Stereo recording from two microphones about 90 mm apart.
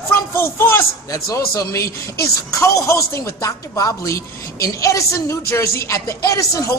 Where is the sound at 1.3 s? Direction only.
40° left (ahead or behind).